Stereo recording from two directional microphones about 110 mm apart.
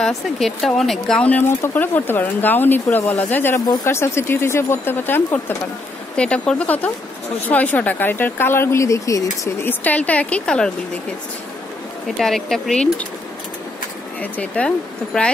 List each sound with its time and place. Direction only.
0.4 s speech: centre (ahead or behind); by 9.5 s 30° left (ahead or behind)
9.7 s speech: 15° left (ahead or behind)
12.2 s speech: 5° left (ahead or behind)
14.2 s speech: 15° left (ahead or behind)